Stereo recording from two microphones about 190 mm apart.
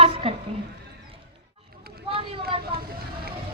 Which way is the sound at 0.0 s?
30° right (ahead or behind).